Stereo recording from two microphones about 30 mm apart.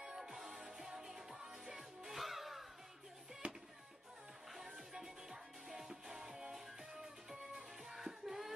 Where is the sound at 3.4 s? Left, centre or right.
Right.